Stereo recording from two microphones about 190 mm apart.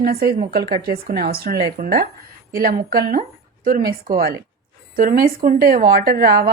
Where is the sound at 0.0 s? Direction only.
55° right (ahead or behind).